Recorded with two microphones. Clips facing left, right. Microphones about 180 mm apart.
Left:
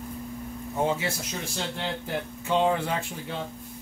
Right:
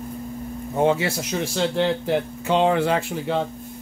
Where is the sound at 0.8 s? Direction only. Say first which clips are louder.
Right 7 dB; 75° right (ahead or behind).